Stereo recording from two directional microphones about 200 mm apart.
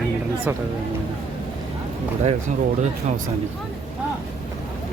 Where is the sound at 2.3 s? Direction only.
35° right (ahead or behind).